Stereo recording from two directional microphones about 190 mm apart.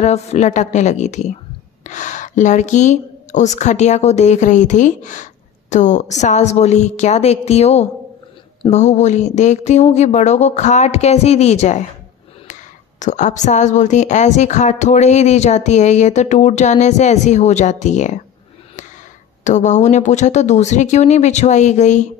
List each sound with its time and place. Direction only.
0.0 s speech: 35° left (ahead or behind)
13.0 s speech: 40° left (ahead or behind)
19.4 s speech: 40° left (ahead or behind)